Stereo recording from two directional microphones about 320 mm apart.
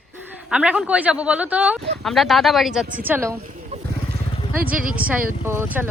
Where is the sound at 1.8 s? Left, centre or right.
Right.